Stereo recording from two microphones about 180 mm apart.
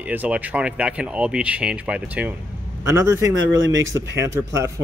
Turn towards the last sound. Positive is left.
turn(degrees=-15)  # may be behind; listen again after turning